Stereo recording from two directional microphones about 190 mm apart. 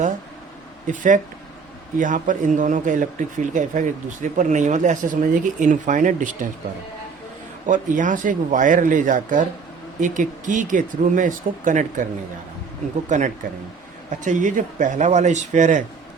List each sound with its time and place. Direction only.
0.9 s speech: 40° right (ahead or behind)
7.7 s speech: 45° right (ahead or behind)
13.1 s speech: 40° right (ahead or behind)